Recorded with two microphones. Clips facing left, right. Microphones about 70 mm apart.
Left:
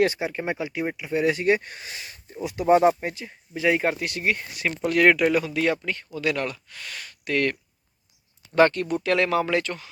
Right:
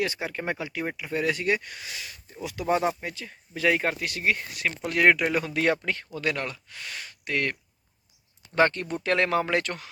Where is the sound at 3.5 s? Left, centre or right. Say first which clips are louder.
Left 2 dB; centre.